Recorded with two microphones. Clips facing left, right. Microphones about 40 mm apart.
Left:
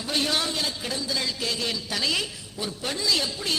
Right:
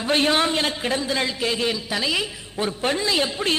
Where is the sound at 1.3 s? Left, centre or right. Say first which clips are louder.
Right 5 dB; right.